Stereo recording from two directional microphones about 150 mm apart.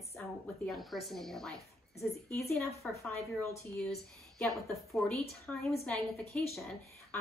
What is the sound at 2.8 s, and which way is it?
A woman's voice, 5° left (ahead or behind).